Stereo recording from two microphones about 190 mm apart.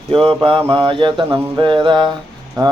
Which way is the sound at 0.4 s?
25° right (ahead or behind).